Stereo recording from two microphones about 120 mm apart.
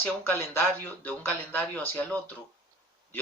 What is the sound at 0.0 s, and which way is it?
A man's voice, 15° left (ahead or behind).